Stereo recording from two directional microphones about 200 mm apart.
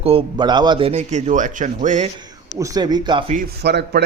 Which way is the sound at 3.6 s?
55° right (ahead or behind).